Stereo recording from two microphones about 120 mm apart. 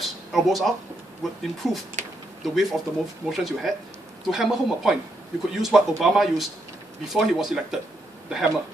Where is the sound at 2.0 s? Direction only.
75° right (ahead or behind).